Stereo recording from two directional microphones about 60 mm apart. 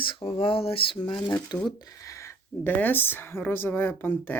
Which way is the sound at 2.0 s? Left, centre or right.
Left.